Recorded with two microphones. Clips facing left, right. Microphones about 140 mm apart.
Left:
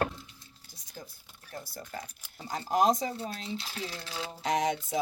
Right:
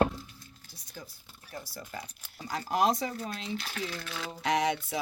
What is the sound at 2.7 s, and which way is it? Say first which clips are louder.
Speech: left 2 dB; 45° left (ahead or behind).